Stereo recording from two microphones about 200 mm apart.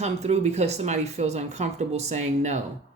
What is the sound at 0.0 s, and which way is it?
Speech, 35° right (ahead or behind).